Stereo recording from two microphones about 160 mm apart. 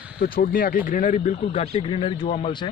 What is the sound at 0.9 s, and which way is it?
A man's voice, 50° left (ahead or behind).